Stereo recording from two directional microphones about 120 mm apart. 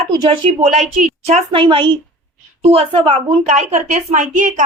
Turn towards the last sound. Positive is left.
turn(degrees=-90)